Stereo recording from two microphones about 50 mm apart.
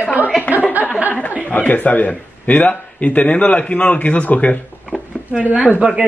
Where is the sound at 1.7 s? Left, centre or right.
Left.